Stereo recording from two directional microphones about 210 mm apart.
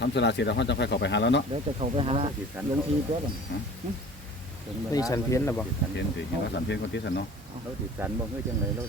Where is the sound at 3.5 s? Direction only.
50° left (ahead or behind).